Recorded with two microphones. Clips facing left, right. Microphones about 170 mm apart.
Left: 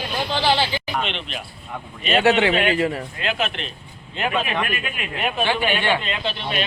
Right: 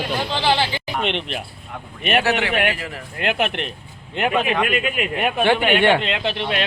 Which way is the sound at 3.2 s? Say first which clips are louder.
Right 6 dB; 60° right (ahead or behind).